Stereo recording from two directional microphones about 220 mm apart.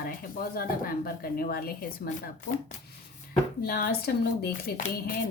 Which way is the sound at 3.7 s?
45° left (ahead or behind).